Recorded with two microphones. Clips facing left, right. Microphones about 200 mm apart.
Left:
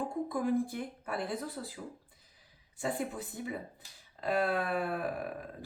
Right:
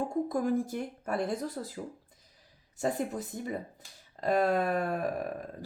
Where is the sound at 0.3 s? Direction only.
40° right (ahead or behind).